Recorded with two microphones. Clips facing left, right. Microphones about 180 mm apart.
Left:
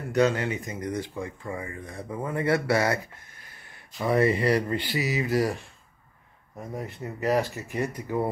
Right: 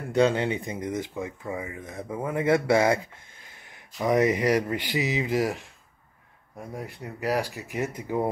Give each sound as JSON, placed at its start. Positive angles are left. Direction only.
{"t": 0.1, "sound": "speech", "side_deg": -25}
{"t": 1.1, "sound": "speech", "side_deg": -5}